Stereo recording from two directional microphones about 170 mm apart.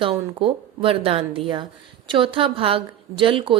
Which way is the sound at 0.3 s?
35° right (ahead or behind).